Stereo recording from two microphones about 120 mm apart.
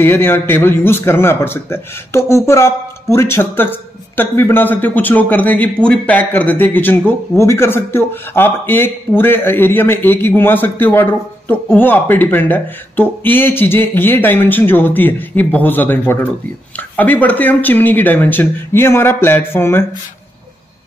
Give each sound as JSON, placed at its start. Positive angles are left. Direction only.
{"t": 0.0, "sound": "speech", "side_deg": 20}